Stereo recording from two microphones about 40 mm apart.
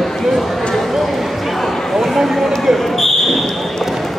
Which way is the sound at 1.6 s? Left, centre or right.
Centre.